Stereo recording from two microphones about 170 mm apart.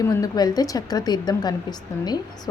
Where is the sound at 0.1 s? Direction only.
20° left (ahead or behind).